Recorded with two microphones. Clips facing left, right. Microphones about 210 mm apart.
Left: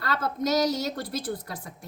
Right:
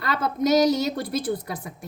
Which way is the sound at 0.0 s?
15° right (ahead or behind).